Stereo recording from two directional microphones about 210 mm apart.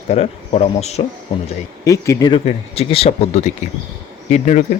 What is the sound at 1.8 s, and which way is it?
Speech, 15° left (ahead or behind).